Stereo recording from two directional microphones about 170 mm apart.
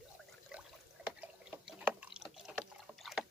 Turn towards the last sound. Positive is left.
turn(degrees=0)  # may be behind; listen again after turning